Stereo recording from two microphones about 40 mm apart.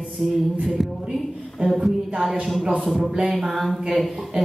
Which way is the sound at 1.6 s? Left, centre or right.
Centre.